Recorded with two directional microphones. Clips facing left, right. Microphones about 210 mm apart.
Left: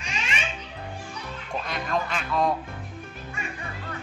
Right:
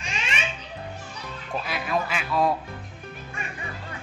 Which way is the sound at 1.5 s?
5° right (ahead or behind).